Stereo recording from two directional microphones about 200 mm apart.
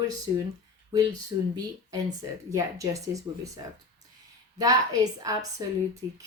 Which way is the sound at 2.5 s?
15° right (ahead or behind).